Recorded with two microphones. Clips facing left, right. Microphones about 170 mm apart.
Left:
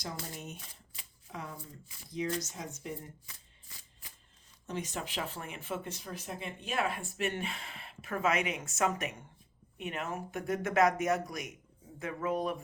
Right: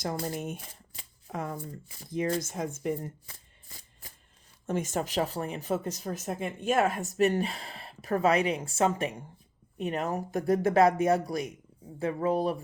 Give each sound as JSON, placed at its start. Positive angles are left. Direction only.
{"t": 0.0, "sound": "speech", "side_deg": -50}
{"t": 3.2, "sound": "a sound", "side_deg": -40}
{"t": 4.6, "sound": "speech", "side_deg": -50}